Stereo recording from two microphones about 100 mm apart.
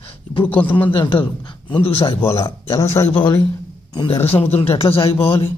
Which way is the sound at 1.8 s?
70° left (ahead or behind).